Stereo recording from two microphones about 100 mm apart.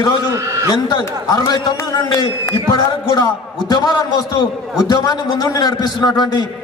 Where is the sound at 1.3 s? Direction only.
40° left (ahead or behind).